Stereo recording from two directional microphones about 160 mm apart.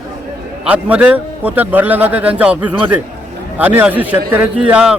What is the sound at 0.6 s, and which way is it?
A man's voice, 5° right (ahead or behind).